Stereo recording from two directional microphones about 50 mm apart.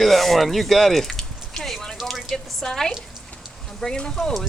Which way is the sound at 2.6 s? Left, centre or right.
Centre.